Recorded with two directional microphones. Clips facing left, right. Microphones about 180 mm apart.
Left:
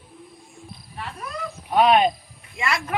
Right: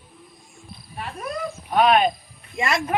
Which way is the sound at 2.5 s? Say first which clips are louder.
Right 3 dB; 20° right (ahead or behind).